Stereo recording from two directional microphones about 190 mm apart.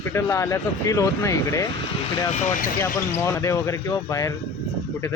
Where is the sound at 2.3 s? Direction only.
40° left (ahead or behind).